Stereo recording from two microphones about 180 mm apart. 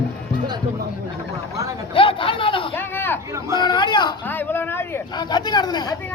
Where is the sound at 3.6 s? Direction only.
25° left (ahead or behind).